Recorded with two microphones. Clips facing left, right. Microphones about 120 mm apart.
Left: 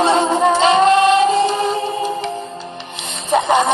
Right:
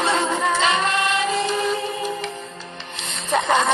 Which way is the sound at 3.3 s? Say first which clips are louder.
Left 5 dB; 15° left (ahead or behind).